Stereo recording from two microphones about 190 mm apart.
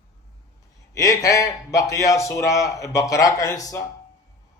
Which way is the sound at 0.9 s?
15° left (ahead or behind).